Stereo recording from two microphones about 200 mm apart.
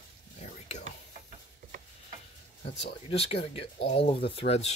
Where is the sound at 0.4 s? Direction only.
35° left (ahead or behind).